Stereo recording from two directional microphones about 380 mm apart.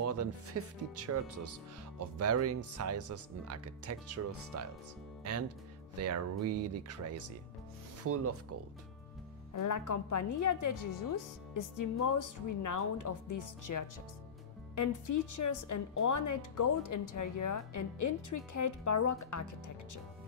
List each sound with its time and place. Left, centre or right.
0.0 s speech: right
9.5 s a woman's voice: left